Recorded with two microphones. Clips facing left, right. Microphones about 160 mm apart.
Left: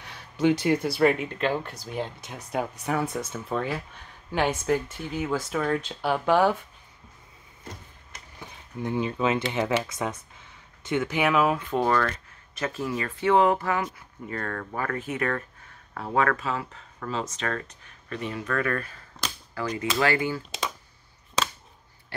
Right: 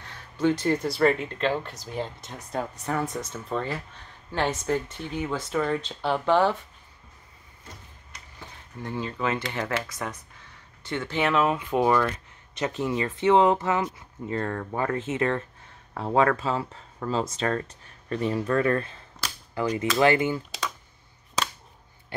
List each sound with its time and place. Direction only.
0.0 s speech: 15° left (ahead or behind)
8.4 s speech: 15° left (ahead or behind)
11.5 s speech: 5° right (ahead or behind); by 20.4 s 20° right (ahead or behind)